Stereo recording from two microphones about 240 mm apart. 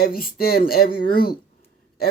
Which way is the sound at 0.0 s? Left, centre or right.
Left.